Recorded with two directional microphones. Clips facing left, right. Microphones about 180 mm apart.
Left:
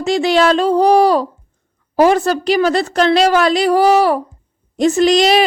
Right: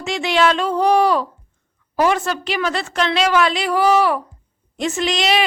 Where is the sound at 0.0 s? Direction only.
35° left (ahead or behind).